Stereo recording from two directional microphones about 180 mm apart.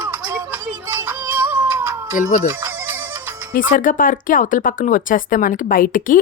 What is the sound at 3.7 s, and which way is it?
Speech, 50° left (ahead or behind).